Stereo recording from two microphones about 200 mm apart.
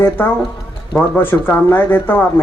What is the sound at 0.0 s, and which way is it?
A man's voice, 10° left (ahead or behind).